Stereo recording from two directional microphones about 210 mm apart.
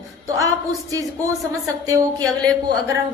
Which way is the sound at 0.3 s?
15° right (ahead or behind).